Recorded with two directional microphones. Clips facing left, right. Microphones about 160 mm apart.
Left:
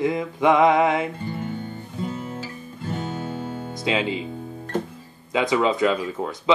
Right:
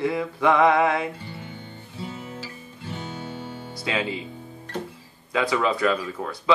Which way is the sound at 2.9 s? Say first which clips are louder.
Left 5 dB; 50° left (ahead or behind).